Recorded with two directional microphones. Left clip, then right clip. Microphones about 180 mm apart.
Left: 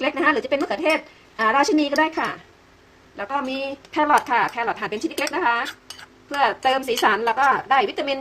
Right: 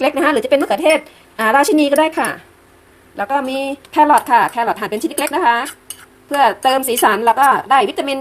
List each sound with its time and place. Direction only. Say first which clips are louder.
0.0 s speech: right 6 dB; 25° right (ahead or behind)